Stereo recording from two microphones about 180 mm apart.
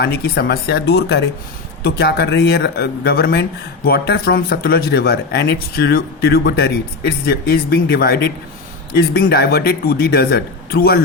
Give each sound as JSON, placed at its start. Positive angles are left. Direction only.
{"t": 0.0, "sound": "speech", "side_deg": 60}